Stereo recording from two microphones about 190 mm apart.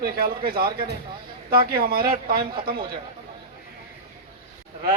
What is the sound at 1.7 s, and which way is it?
Speech, 50° right (ahead or behind).